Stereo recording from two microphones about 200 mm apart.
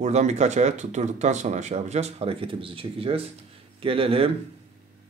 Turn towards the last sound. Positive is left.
turn(degrees=-30)  # may be behind; listen again after turning